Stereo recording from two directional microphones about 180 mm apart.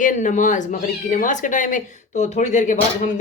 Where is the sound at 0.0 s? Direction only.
45° left (ahead or behind).